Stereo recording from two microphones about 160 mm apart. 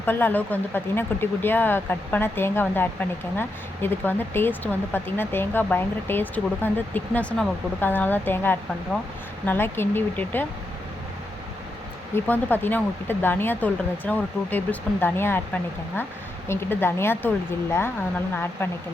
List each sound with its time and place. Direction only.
0.0 s speech: 10° left (ahead or behind)
12.1 s speech: 10° left (ahead or behind)